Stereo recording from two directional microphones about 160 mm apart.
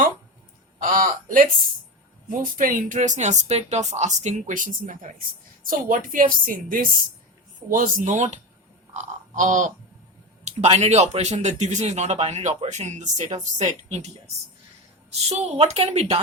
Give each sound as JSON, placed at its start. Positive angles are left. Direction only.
{"t": 0.8, "sound": "a sound", "side_deg": -60}
{"t": 2.4, "sound": "a woman's voice", "side_deg": -60}
{"t": 15.3, "sound": "a woman's voice", "side_deg": -40}